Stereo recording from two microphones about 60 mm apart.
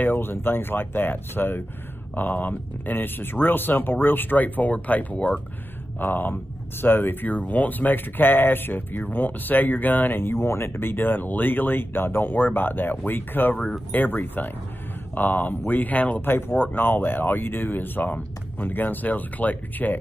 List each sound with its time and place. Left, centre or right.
0.0 s speech: left
5.9 s speech: left
16.2 s speech: left